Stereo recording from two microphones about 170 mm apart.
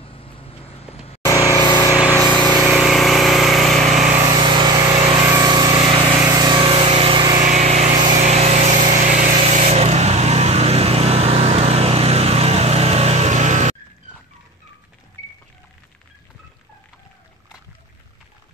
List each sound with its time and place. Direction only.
0.0 s vehicle: 35° left (ahead or behind)
1.2 s vehicle: 20° left (ahead or behind)
2.7 s vehicle: centre (ahead or behind)
4.3 s vehicle: 25° right (ahead or behind)
7.4 s a sound: 45° right (ahead or behind)
8.2 s vehicle: 40° right (ahead or behind)